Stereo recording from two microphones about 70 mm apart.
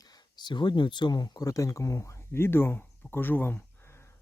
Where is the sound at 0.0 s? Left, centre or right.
Left.